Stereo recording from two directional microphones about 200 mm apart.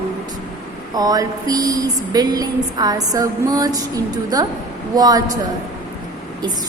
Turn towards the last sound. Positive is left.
turn(degrees=-20)  # may be behind; listen again after turning